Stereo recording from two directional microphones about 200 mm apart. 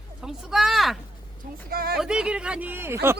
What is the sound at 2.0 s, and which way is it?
Speech, 5° right (ahead or behind).